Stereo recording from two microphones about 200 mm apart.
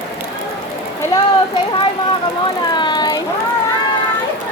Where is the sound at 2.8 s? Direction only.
20° left (ahead or behind).